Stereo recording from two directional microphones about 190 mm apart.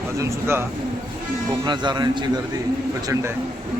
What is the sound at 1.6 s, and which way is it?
A man's voice, 20° right (ahead or behind).